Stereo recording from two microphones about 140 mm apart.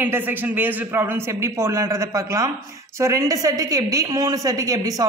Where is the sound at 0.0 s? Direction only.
15° right (ahead or behind).